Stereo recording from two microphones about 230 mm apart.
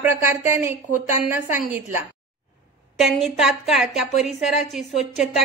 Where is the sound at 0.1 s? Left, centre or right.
Centre.